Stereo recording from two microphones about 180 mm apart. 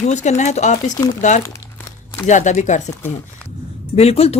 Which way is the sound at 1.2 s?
40° left (ahead or behind).